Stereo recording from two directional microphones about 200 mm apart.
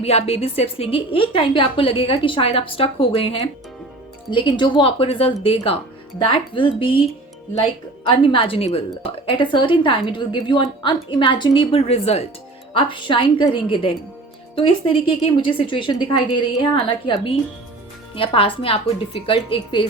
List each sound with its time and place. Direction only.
0.0 s a woman's voice: 30° left (ahead or behind)
18.1 s a woman's voice: 25° left (ahead or behind)